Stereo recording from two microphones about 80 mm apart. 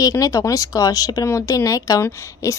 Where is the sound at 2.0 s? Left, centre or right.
Left.